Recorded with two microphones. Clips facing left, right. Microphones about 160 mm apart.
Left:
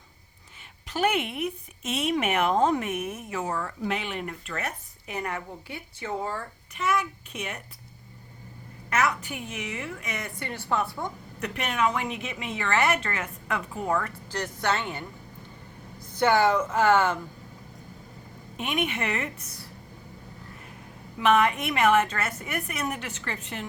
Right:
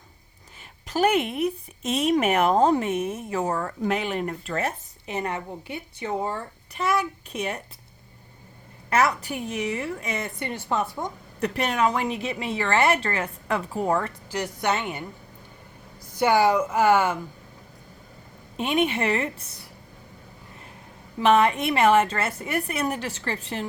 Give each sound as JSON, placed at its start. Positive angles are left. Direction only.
{"t": 0.9, "sound": "a woman's voice", "side_deg": -40}
{"t": 6.7, "sound": "a woman's voice", "side_deg": -35}
{"t": 8.9, "sound": "a woman's voice", "side_deg": -35}
{"t": 11.3, "sound": "a woman's voice", "side_deg": -35}
{"t": 14.3, "sound": "speech", "side_deg": -10}
{"t": 16.1, "sound": "speech", "side_deg": -10}
{"t": 18.5, "sound": "a woman's voice", "side_deg": -30}
{"t": 21.2, "sound": "a woman's voice", "side_deg": -30}